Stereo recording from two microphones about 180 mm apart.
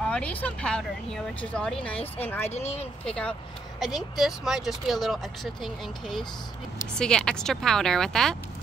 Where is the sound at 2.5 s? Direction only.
35° left (ahead or behind).